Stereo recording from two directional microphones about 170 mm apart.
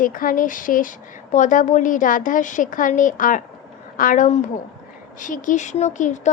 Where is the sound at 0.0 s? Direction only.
55° left (ahead or behind).